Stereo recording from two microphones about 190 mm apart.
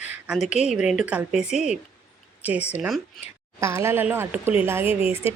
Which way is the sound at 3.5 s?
15° right (ahead or behind).